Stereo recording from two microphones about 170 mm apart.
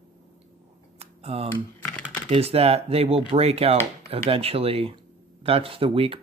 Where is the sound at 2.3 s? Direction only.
35° right (ahead or behind).